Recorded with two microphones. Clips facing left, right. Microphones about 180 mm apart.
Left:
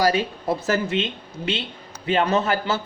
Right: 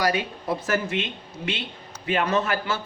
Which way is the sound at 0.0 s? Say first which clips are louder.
Left 4 dB; 30° left (ahead or behind).